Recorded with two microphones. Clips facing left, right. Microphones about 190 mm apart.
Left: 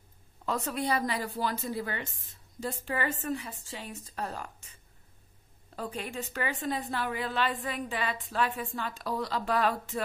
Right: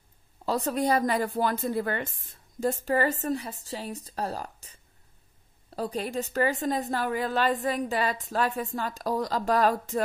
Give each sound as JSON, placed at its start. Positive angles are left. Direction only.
{"t": 0.5, "sound": "a woman's voice", "side_deg": -40}
{"t": 2.6, "sound": "a woman's voice", "side_deg": -40}
{"t": 5.8, "sound": "a woman's voice", "side_deg": -35}